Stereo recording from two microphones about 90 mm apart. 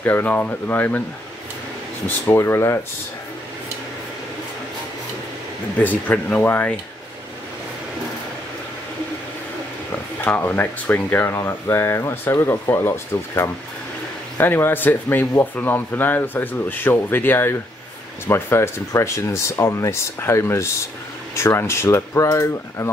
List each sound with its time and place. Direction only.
0.0 s speech: 20° left (ahead or behind)
2.0 s speech: 25° left (ahead or behind)
5.8 s speech: 20° left (ahead or behind)
10.2 s speech: 20° left (ahead or behind)